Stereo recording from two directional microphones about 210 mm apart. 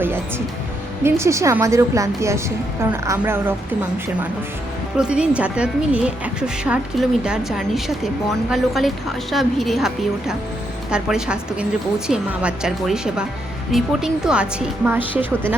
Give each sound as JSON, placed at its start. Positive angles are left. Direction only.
{"t": 0.0, "sound": "music", "side_deg": -10}
{"t": 1.0, "sound": "a woman's voice", "side_deg": -10}
{"t": 4.9, "sound": "a woman's voice", "side_deg": -5}